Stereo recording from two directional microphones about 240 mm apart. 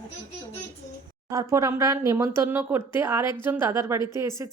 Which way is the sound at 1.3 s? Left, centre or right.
Centre.